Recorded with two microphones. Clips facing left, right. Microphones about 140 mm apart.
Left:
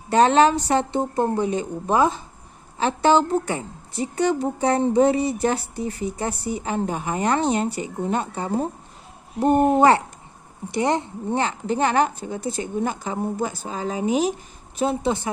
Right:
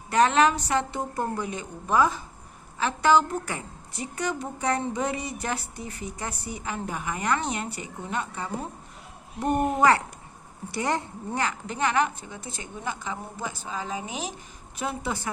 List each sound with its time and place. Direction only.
0.1 s a woman's voice: 30° left (ahead or behind)